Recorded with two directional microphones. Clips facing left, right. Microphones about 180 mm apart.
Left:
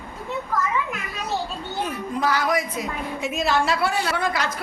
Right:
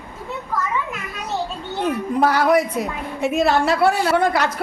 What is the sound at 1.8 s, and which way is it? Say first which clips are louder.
A woman's voice: right 7 dB; 60° right (ahead or behind).